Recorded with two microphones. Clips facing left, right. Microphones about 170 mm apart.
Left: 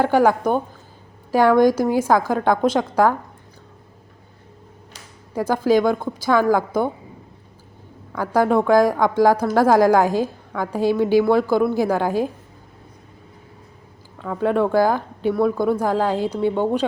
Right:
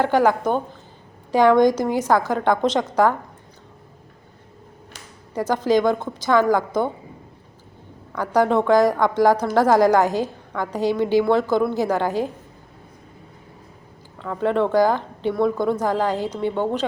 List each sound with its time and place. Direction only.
0.0 s a woman's voice: 10° left (ahead or behind)
5.3 s a woman's voice: 10° left (ahead or behind)
8.1 s a woman's voice: 10° left (ahead or behind)
14.2 s a woman's voice: 10° left (ahead or behind)